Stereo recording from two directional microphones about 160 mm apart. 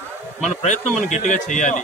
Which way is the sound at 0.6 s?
50° left (ahead or behind).